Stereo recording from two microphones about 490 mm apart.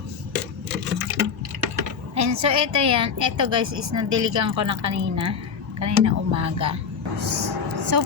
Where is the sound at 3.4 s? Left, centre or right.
Right.